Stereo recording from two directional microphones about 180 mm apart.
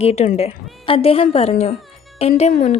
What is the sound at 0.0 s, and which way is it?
A woman's voice, 35° left (ahead or behind).